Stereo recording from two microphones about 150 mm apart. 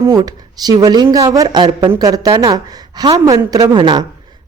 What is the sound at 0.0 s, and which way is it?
Speech, 25° right (ahead or behind).